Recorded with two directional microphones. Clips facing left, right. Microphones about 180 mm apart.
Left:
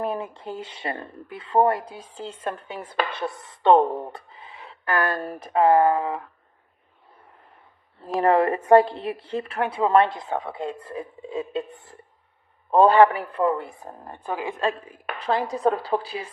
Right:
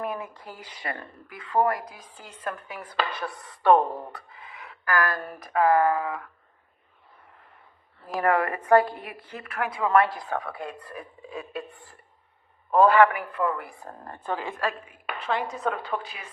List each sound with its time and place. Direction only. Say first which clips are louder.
0.0 s speech: left 4 dB; 30° left (ahead or behind)
8.2 s speech: left 5 dB; 30° left (ahead or behind)
14.8 s a woman's voice: left 4 dB; 35° left (ahead or behind)